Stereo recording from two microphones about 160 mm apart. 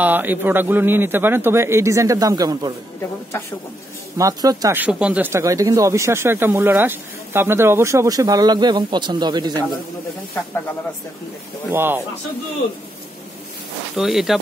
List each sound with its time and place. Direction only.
0.0 s a man's voice: 10° right (ahead or behind)
3.0 s speech: 15° left (ahead or behind)
4.2 s speech: 20° right (ahead or behind)
4.7 s speech: 10° right (ahead or behind); by 9.7 s 25° right (ahead or behind)
11.7 s a man's voice: 15° right (ahead or behind)
13.9 s speech: centre (ahead or behind)